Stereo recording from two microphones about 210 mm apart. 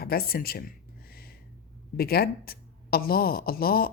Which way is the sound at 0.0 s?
45° left (ahead or behind).